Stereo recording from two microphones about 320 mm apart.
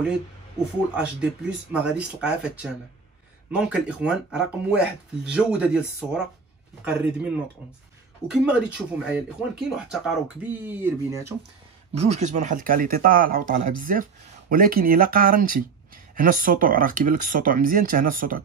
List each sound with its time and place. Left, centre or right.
0.9 s speech: centre
8.3 s speech: centre
11.9 s speech: right